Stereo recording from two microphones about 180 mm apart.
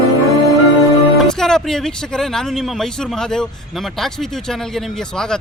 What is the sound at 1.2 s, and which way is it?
Speech, 5° left (ahead or behind).